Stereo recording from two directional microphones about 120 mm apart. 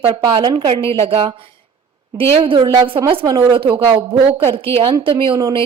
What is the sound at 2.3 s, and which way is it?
A woman's voice, 45° right (ahead or behind).